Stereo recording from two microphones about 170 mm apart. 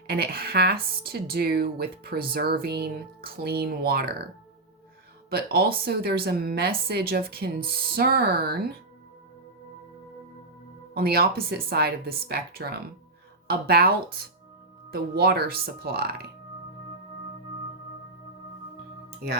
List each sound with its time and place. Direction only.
0.1 s speech: 65° right (ahead or behind)
5.3 s speech: 65° right (ahead or behind)
10.9 s speech: 65° right (ahead or behind)